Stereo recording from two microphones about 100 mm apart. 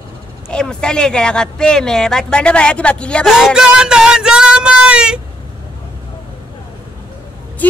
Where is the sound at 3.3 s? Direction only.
Centre (ahead or behind).